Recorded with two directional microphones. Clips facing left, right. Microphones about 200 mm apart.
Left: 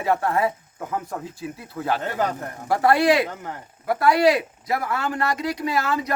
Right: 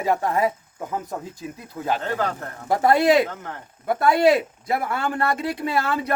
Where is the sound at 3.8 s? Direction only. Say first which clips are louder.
Even; 25° right (ahead or behind).